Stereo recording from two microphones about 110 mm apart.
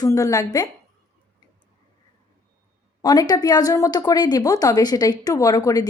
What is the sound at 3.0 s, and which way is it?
A woman's voice, 35° left (ahead or behind).